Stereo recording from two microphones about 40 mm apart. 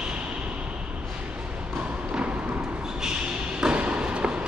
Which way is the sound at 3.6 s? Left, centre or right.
Right.